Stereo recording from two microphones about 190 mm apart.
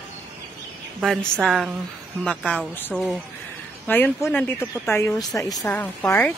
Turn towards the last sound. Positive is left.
turn(degrees=10)  # may be behind; listen again after turning